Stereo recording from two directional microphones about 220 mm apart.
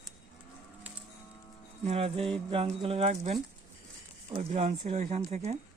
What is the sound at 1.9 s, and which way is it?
Speech, 25° right (ahead or behind).